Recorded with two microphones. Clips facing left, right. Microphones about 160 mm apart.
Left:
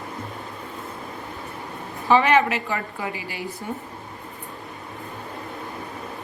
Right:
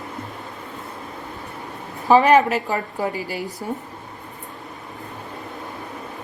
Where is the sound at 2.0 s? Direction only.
40° right (ahead or behind).